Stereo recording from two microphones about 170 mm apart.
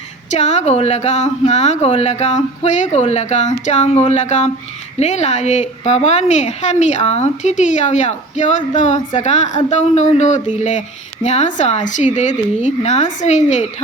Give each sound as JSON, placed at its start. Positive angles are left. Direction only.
{"t": 0.3, "sound": "a woman's voice", "side_deg": 40}